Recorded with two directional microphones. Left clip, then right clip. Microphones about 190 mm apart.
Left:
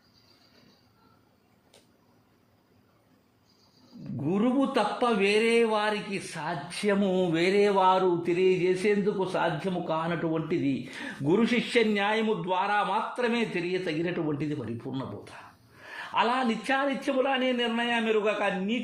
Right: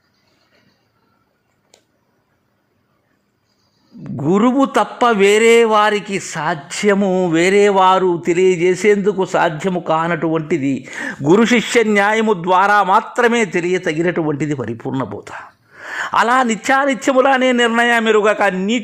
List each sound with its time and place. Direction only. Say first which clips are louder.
4.2 s a man's voice: right 13 dB; 50° right (ahead or behind)